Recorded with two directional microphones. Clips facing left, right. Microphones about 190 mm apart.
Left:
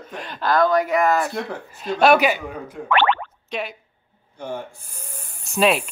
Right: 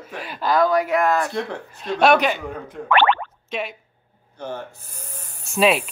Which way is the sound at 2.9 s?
50° right (ahead or behind).